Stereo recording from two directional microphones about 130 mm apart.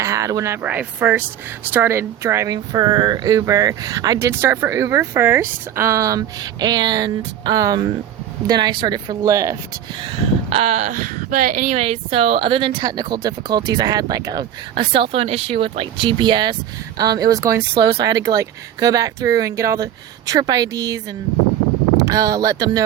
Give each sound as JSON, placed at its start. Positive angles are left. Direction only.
{"t": 0.0, "sound": "speech", "side_deg": -25}
{"t": 2.7, "sound": "speech", "side_deg": -35}
{"t": 9.9, "sound": "a sound", "side_deg": -40}
{"t": 10.9, "sound": "speech", "side_deg": -90}
{"t": 11.7, "sound": "speech", "side_deg": -50}
{"t": 14.8, "sound": "speech", "side_deg": -40}